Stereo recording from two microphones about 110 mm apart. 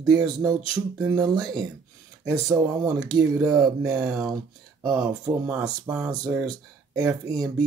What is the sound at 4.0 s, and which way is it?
Speech, 5° right (ahead or behind).